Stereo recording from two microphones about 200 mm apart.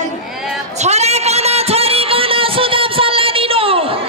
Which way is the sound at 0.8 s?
35° right (ahead or behind).